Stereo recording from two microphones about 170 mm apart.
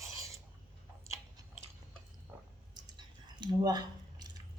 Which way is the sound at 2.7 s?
25° right (ahead or behind).